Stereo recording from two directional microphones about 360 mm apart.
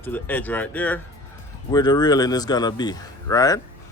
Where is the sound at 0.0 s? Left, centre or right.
Centre.